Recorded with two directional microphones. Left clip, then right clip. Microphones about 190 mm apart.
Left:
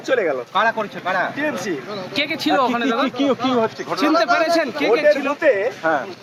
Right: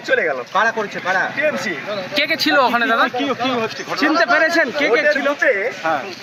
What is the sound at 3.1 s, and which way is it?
Speech, 65° left (ahead or behind).